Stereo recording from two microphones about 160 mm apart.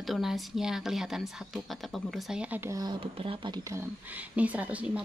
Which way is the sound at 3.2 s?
30° right (ahead or behind).